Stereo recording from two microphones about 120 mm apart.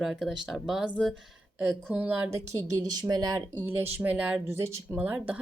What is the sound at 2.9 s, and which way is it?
Speech, 35° right (ahead or behind).